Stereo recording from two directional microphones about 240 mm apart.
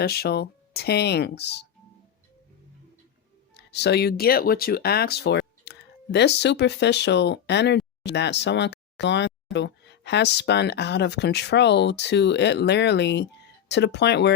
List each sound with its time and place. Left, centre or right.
0.0 s speech: left
3.5 s speech: left